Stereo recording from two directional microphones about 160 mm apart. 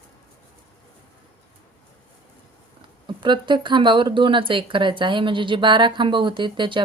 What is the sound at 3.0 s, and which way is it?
Speech, 30° right (ahead or behind).